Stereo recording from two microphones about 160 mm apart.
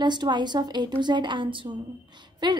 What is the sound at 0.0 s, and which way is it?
A woman's voice, 25° right (ahead or behind).